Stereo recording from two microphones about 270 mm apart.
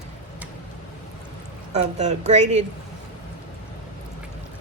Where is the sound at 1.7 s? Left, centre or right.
Right.